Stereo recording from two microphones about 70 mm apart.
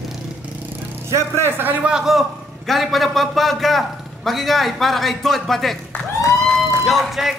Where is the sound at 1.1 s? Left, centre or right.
Right.